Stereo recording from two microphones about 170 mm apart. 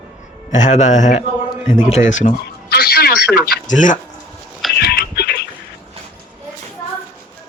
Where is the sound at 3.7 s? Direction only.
50° left (ahead or behind).